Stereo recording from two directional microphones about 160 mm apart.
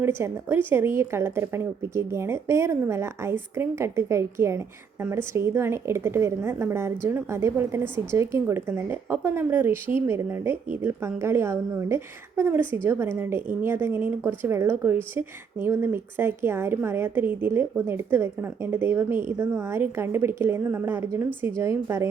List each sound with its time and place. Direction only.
0.0 s a woman's voice: 15° right (ahead or behind)